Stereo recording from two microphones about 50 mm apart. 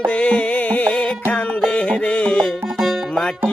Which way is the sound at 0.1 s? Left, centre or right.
Left.